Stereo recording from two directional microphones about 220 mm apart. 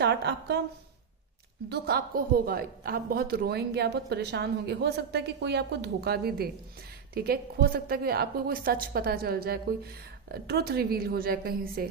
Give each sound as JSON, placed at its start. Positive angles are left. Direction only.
{"t": 0.0, "sound": "a woman's voice", "side_deg": -50}
{"t": 1.7, "sound": "a woman's voice", "side_deg": -45}